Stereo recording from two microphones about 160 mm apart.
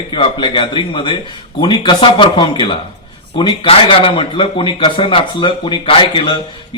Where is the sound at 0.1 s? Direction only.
30° left (ahead or behind).